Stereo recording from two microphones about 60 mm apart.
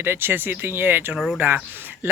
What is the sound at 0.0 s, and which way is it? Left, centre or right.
Speech, right.